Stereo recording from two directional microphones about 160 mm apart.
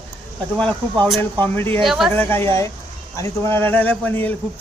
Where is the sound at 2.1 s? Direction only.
15° left (ahead or behind).